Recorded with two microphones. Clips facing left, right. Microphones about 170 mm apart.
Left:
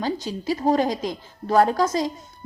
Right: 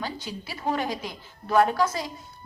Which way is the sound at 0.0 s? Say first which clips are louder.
Left 8 dB; 40° left (ahead or behind).